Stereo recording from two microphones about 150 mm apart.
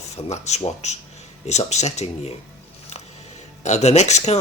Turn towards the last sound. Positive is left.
turn(degrees=45)  # may be behind; listen again after turning